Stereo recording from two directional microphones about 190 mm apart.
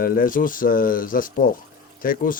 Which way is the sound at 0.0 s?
45° left (ahead or behind).